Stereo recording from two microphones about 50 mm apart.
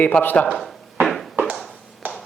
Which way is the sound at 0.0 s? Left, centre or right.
Left.